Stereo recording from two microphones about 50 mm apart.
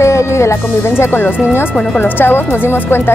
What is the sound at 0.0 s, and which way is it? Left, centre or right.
Speech, left.